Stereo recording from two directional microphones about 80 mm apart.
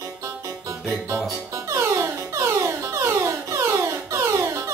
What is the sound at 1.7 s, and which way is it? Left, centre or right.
Music, right.